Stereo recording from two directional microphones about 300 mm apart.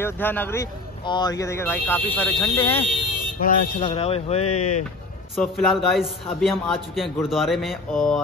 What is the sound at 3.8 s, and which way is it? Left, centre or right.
Speech, centre.